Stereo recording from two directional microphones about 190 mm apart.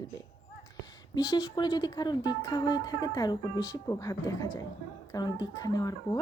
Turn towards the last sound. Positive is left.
turn(degrees=20)  # may be behind; listen again after turning